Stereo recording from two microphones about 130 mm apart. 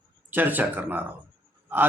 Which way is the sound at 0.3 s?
15° right (ahead or behind).